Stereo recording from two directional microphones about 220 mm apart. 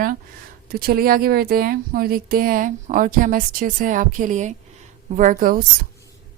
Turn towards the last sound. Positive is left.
turn(degrees=-40)  # may be behind; listen again after turning